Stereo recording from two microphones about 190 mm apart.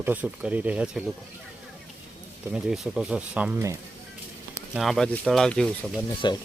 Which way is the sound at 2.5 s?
Centre (ahead or behind).